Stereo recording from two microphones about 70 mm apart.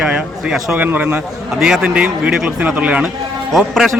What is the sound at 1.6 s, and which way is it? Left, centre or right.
Speech, centre.